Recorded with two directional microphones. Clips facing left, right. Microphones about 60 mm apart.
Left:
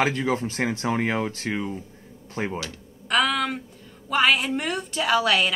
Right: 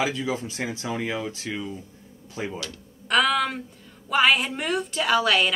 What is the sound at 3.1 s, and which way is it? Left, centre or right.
A woman's voice, centre.